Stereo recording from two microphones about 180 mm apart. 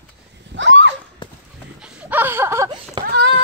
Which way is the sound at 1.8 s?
10° right (ahead or behind).